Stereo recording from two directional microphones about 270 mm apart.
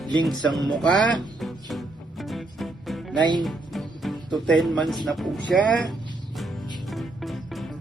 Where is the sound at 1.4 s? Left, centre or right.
Centre.